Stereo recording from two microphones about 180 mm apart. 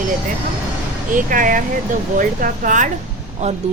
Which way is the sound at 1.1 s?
50° right (ahead or behind).